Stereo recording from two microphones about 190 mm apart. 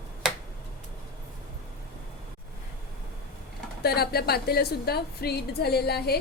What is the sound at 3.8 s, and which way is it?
A woman's voice, 55° left (ahead or behind).